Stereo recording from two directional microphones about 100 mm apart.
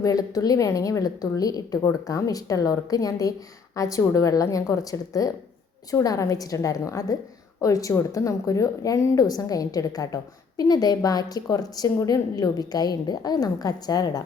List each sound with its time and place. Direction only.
0.0 s a woman's voice: 35° left (ahead or behind)